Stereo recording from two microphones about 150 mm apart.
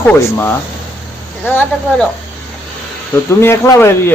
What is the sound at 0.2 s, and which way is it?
Speech, 15° left (ahead or behind).